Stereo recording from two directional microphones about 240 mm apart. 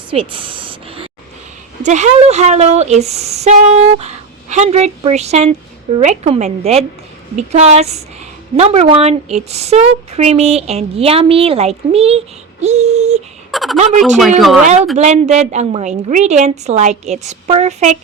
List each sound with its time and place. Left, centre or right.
0.1 s speech: right
13.5 s a sound: centre
14.2 s speech: centre
14.9 s speech: right